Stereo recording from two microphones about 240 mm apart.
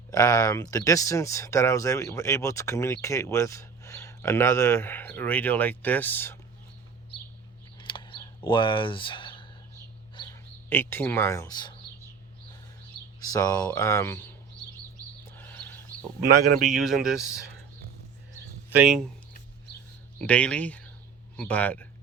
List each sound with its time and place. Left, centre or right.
0.1 s speech: centre
7.8 s a sound: centre
10.7 s speech: centre
13.1 s speech: centre
15.3 s a sound: centre
16.6 s speech: centre
18.9 s speech: centre
20.1 s speech: centre